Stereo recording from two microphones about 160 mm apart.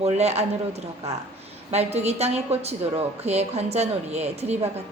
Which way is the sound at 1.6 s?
40° right (ahead or behind).